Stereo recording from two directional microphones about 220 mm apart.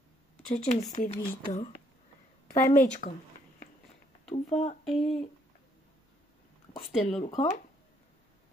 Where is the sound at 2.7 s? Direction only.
35° left (ahead or behind).